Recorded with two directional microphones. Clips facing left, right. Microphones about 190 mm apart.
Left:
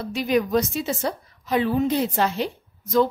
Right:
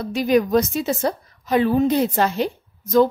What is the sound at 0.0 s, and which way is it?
A woman's voice, 45° right (ahead or behind).